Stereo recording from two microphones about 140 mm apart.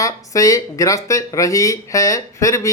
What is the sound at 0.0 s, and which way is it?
Speech, 25° left (ahead or behind).